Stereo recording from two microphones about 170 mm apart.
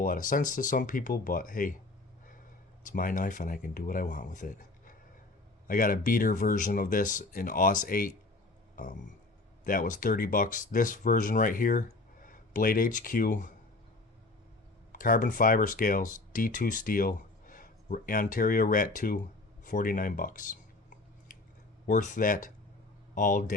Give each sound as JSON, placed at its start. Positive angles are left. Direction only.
{"t": 0.0, "sound": "speech", "side_deg": 55}
{"t": 2.8, "sound": "speech", "side_deg": 55}
{"t": 8.7, "sound": "a sound", "side_deg": 50}
{"t": 9.6, "sound": "speech", "side_deg": 50}
{"t": 14.9, "sound": "speech", "side_deg": 55}
{"t": 21.8, "sound": "speech", "side_deg": 50}